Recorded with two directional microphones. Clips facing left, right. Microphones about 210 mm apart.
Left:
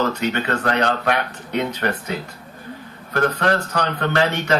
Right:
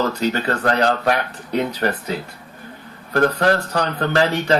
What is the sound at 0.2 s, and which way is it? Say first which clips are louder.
Speech: right 2 dB; 35° right (ahead or behind).